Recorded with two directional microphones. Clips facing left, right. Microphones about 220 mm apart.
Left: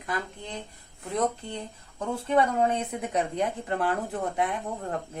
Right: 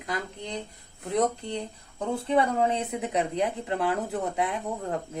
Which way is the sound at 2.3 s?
20° right (ahead or behind).